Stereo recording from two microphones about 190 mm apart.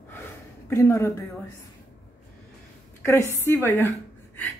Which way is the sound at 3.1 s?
10° left (ahead or behind).